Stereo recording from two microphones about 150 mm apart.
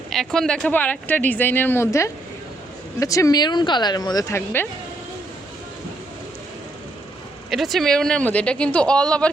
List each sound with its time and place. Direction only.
0.1 s speech: centre (ahead or behind)
7.5 s speech: centre (ahead or behind)